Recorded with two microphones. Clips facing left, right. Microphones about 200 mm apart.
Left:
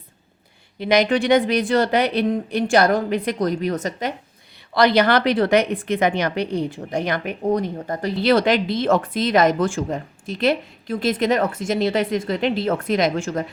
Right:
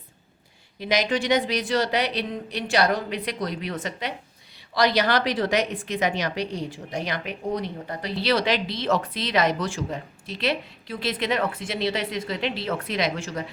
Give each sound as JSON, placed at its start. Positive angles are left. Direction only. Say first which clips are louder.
{"t": 0.8, "sound": "a woman's voice", "louder": "left 6 dB", "side_deg": 55}
{"t": 4.7, "sound": "a woman's voice", "louder": "left 5 dB", "side_deg": 55}